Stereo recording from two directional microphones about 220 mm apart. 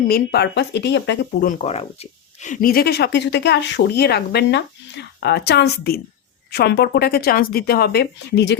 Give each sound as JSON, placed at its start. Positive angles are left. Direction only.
{"t": 0.1, "sound": "speech", "side_deg": 45}